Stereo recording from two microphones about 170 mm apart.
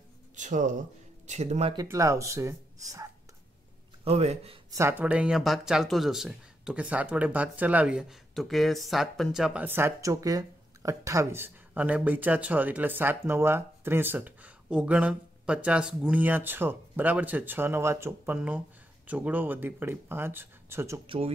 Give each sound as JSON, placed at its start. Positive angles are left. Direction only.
{"t": 0.4, "sound": "speech", "side_deg": -45}
{"t": 1.8, "sound": "speech", "side_deg": -20}
{"t": 4.0, "sound": "speech", "side_deg": -35}
{"t": 4.6, "sound": "speech", "side_deg": -15}